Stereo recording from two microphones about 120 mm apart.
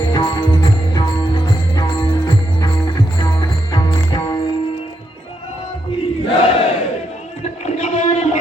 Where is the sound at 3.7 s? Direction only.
40° left (ahead or behind).